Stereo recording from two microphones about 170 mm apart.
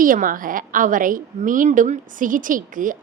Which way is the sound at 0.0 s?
55° right (ahead or behind).